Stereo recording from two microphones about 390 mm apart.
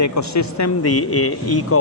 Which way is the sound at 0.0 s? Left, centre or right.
Left.